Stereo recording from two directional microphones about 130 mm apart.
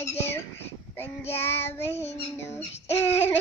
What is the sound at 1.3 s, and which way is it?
Laughter, 15° left (ahead or behind).